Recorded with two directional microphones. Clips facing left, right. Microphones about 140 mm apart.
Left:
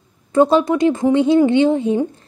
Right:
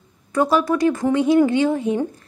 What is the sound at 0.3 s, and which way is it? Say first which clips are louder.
A woman's voice: left 5 dB; 25° left (ahead or behind).